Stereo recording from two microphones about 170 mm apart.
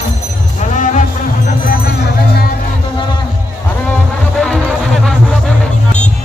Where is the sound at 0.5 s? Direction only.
45° left (ahead or behind).